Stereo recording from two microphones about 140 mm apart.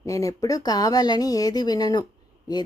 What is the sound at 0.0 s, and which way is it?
A woman's voice, 25° left (ahead or behind).